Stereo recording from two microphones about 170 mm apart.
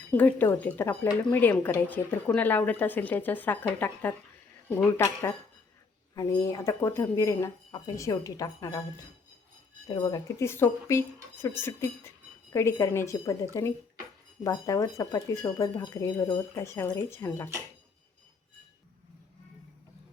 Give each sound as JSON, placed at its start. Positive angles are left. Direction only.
{"t": 0.1, "sound": "speech", "side_deg": 10}
{"t": 9.9, "sound": "speech", "side_deg": 25}